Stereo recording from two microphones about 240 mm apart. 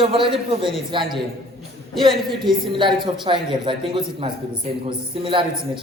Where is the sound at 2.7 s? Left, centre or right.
Centre.